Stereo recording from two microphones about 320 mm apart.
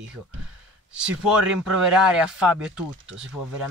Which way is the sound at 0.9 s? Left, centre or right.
Centre.